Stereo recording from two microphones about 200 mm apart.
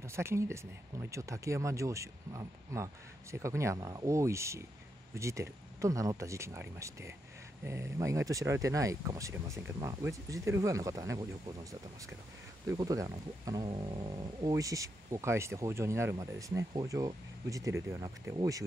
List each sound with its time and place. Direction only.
0.0 s speech: 15° right (ahead or behind)
12.6 s speech: 15° right (ahead or behind)